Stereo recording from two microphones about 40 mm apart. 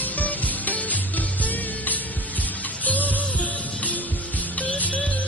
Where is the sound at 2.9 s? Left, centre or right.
Left.